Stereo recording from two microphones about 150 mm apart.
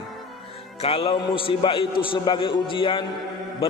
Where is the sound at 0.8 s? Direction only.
40° left (ahead or behind).